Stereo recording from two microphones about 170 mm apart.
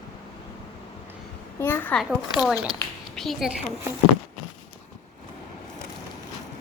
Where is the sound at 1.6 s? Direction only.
10° left (ahead or behind).